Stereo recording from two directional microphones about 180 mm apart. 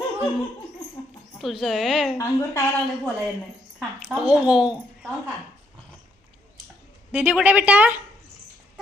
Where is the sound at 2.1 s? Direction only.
15° left (ahead or behind).